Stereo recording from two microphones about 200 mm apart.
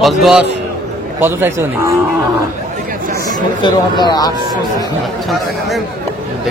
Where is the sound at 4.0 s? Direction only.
20° left (ahead or behind).